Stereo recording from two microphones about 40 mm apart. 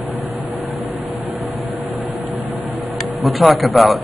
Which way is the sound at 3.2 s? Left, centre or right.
Centre.